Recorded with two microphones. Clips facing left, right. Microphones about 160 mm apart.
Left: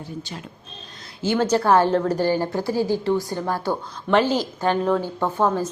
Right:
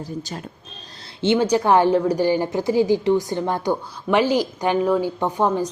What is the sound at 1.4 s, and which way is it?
A woman's voice, 15° right (ahead or behind).